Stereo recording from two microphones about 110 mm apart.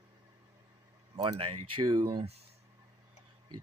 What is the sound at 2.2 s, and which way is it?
Speech, 70° right (ahead or behind).